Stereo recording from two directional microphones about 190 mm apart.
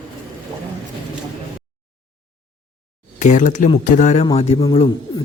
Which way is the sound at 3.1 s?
40° left (ahead or behind).